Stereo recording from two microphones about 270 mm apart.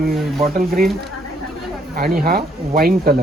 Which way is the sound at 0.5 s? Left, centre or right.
Right.